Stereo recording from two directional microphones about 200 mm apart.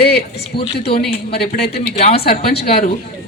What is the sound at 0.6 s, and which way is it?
Speech, 30° left (ahead or behind).